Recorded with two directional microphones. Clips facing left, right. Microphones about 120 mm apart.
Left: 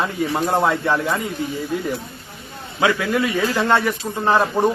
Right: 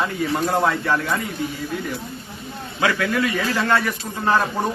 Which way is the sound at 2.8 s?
20° left (ahead or behind).